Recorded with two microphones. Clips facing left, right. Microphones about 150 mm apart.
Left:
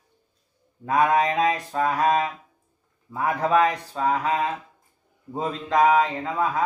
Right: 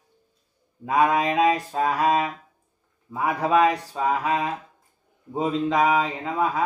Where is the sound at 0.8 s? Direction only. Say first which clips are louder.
Even; 15° right (ahead or behind).